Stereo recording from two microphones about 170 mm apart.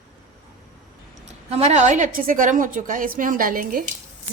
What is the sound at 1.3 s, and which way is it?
A woman's voice, 40° right (ahead or behind).